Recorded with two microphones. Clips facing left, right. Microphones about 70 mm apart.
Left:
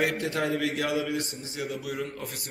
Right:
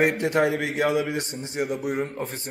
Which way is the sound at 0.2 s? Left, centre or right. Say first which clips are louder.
Right 5 dB; right.